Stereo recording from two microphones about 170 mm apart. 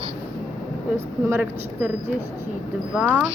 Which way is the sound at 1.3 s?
10° right (ahead or behind).